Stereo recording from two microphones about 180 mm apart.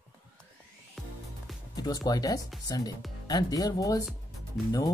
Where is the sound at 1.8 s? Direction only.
20° left (ahead or behind).